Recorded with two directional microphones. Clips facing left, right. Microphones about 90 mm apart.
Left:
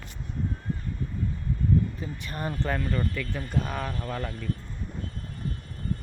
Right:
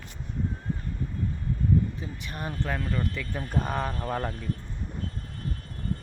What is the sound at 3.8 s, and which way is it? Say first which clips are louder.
Speech: right 2 dB; 25° right (ahead or behind).